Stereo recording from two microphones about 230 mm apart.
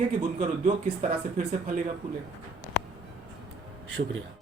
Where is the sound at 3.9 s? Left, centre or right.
Right.